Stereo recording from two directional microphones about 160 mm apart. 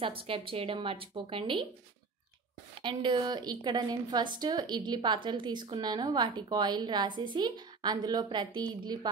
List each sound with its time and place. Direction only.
0.3 s a woman's voice: 35° right (ahead or behind)
2.7 s a woman's voice: 30° right (ahead or behind)